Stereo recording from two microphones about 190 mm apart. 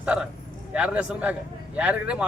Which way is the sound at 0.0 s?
5° right (ahead or behind).